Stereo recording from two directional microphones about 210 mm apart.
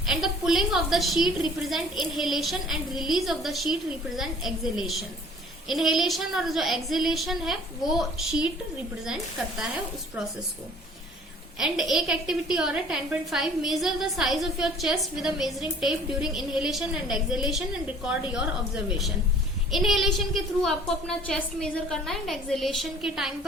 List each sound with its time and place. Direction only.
0.0 s a woman's voice: centre (ahead or behind)
11.6 s a woman's voice: centre (ahead or behind)